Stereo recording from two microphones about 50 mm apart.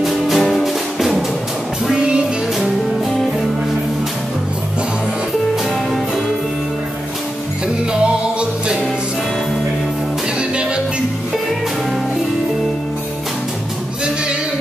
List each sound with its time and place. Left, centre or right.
0.0 s music: centre
2.0 s music: centre
7.9 s music: centre